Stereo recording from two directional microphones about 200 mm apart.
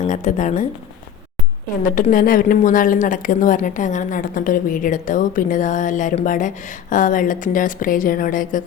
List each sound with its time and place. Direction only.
0.1 s a woman's voice: 40° left (ahead or behind)
1.8 s a woman's voice: 40° left (ahead or behind)